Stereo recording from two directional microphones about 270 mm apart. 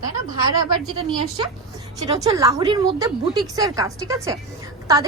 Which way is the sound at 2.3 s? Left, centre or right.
Centre.